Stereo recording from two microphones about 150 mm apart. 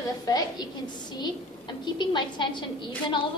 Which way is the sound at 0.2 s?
25° left (ahead or behind).